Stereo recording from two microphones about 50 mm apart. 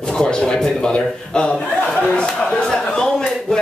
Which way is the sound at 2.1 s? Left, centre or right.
Centre.